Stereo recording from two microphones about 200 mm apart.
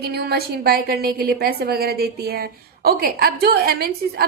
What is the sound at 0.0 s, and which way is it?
A woman's voice, 50° right (ahead or behind).